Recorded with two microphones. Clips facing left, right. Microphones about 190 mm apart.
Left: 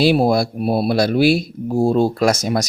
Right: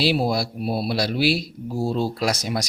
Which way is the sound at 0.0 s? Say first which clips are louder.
Left 7 dB; 50° left (ahead or behind).